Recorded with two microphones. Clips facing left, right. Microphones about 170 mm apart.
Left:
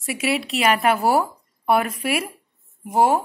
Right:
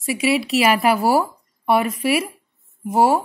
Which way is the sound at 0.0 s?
Centre (ahead or behind).